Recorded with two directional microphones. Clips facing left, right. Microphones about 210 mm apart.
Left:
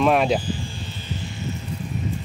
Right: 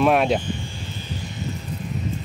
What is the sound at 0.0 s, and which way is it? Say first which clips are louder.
Speech: even; centre (ahead or behind).